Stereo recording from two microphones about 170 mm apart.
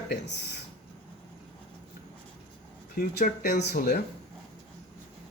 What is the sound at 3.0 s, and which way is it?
Speech, 60° left (ahead or behind).